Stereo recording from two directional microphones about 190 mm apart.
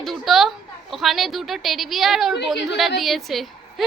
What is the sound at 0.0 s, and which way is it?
A woman's voice, centre (ahead or behind).